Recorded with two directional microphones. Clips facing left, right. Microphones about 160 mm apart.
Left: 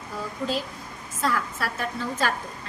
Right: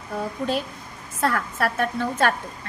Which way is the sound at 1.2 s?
60° right (ahead or behind).